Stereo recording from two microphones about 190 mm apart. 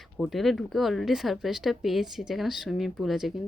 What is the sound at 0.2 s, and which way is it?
Speech, centre (ahead or behind).